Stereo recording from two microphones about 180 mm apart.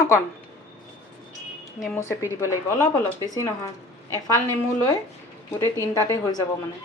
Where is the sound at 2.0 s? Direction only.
15° left (ahead or behind).